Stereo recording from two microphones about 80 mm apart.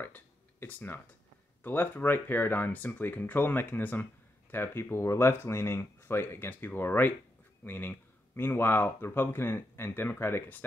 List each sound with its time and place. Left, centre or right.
0.0 s speech: left